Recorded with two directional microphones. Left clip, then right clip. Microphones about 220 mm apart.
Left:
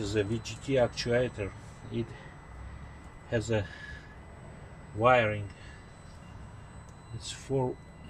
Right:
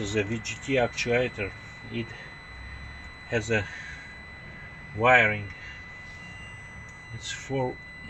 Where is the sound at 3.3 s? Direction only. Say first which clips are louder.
Right 4 dB; 10° right (ahead or behind).